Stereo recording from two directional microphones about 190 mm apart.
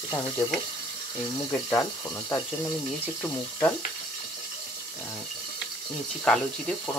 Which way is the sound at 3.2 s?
10° left (ahead or behind).